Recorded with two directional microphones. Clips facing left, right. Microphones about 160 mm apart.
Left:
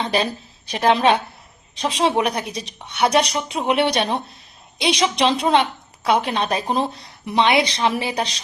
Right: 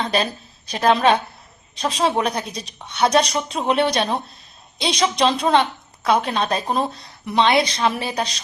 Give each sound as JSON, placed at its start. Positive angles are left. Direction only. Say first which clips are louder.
{"t": 0.7, "sound": "a woman's voice", "louder": "even", "side_deg": 20}